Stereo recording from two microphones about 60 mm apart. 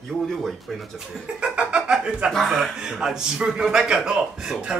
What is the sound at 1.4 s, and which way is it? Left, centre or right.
Speech, centre.